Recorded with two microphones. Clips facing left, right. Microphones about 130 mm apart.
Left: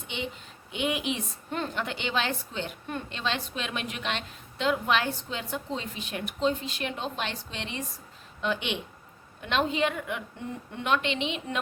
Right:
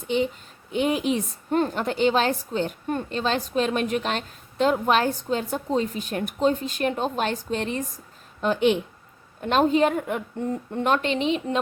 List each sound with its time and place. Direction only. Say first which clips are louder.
0.7 s a woman's voice: right 7 dB; 40° right (ahead or behind)